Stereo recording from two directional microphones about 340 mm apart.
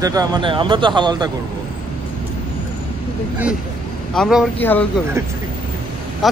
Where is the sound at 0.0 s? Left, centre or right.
Centre.